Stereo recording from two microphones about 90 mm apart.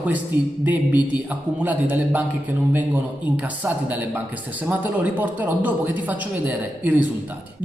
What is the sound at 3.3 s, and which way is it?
Speech, 20° right (ahead or behind).